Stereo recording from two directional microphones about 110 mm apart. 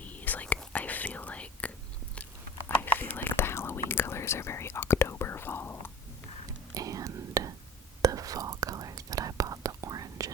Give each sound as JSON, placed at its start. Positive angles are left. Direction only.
{"t": 0.0, "sound": "whispering", "side_deg": 15}
{"t": 3.0, "sound": "whispering", "side_deg": 15}
{"t": 6.7, "sound": "whispering", "side_deg": -30}